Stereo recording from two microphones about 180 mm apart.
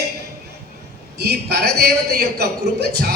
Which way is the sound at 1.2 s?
60° right (ahead or behind).